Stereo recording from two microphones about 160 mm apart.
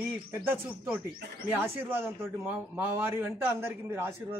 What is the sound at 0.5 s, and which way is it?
A man's voice, 10° right (ahead or behind).